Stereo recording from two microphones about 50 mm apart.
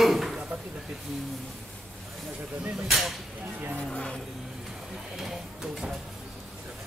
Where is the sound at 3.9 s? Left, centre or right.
Centre.